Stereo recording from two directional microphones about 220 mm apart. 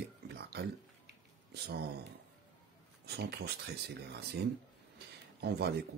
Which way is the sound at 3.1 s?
50° right (ahead or behind).